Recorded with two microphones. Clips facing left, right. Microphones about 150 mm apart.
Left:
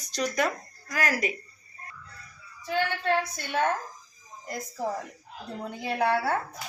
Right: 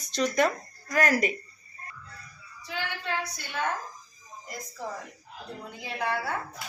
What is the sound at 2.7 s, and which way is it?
Speech, 55° left (ahead or behind).